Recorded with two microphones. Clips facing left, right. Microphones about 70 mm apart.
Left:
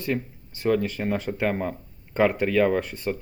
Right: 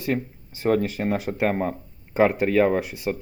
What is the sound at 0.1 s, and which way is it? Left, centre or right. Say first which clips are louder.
Speech: right 2 dB; right.